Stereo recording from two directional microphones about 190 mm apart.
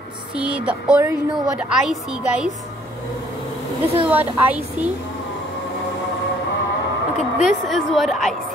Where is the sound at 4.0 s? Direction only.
10° right (ahead or behind).